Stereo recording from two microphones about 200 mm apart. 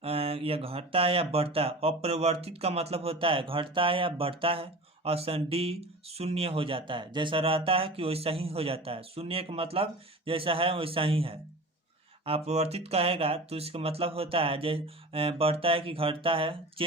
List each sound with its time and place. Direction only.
0.0 s speech: 30° right (ahead or behind)